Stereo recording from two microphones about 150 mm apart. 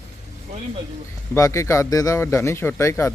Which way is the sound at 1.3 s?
20° left (ahead or behind).